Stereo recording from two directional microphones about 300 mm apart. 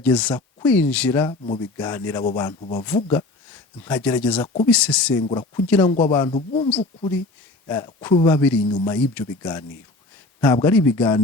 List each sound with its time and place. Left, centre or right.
0.0 s speech: centre
1.3 s speech: centre
2.8 s speech: centre
5.2 s speech: centre
5.9 s speech: centre
7.7 s speech: centre